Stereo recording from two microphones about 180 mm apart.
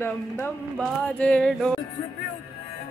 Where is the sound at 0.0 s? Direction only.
10° left (ahead or behind).